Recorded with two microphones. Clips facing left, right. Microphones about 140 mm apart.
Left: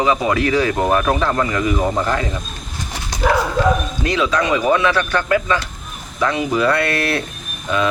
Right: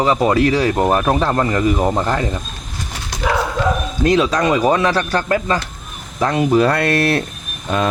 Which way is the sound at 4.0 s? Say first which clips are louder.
Right 6 dB; 45° right (ahead or behind).